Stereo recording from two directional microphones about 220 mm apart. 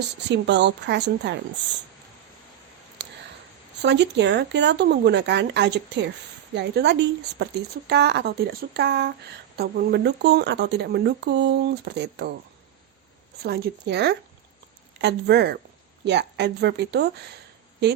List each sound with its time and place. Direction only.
0.3 s speech: 50° right (ahead or behind)
3.0 s a sound: 50° right (ahead or behind)
3.8 s speech: 50° right (ahead or behind)
13.4 s speech: 45° right (ahead or behind)